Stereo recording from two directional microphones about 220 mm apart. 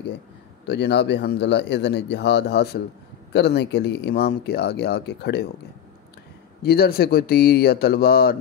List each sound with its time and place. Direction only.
0.7 s speech: 50° left (ahead or behind)
6.6 s speech: 45° left (ahead or behind)